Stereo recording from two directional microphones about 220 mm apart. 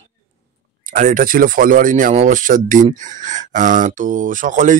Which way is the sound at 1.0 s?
40° right (ahead or behind).